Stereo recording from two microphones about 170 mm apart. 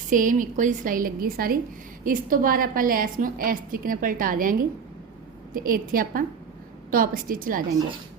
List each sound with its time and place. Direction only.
0.1 s a woman's voice: 50° right (ahead or behind)
5.5 s a woman's voice: 55° right (ahead or behind)